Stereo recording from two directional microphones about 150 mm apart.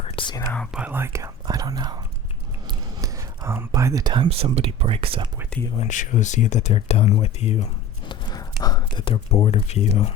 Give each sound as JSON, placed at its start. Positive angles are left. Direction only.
{"t": 0.2, "sound": "whispering", "side_deg": 30}
{"t": 0.7, "sound": "speech", "side_deg": -10}
{"t": 2.6, "sound": "whispering", "side_deg": -25}
{"t": 3.7, "sound": "speech", "side_deg": -20}
{"t": 5.7, "sound": "speech", "side_deg": 50}
{"t": 8.0, "sound": "a sound", "side_deg": 30}
{"t": 8.6, "sound": "speech", "side_deg": 25}